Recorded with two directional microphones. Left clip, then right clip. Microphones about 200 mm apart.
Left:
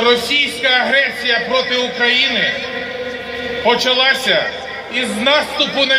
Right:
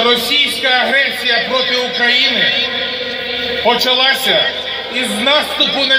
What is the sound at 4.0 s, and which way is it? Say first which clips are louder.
Speech: right 1 dB; 15° right (ahead or behind).